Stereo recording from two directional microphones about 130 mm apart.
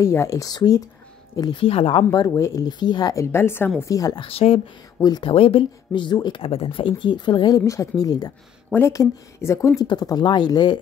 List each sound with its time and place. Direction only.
0.0 s speech: 20° left (ahead or behind); by 2.0 s 45° left (ahead or behind)
2.0 s speech: 25° left (ahead or behind)
4.2 s speech: 45° left (ahead or behind)
5.0 s speech: 30° left (ahead or behind)
5.3 s speech: 45° left (ahead or behind)
7.0 s speech: 35° left (ahead or behind)